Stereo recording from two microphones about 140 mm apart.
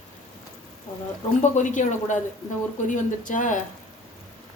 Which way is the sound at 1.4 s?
60° left (ahead or behind).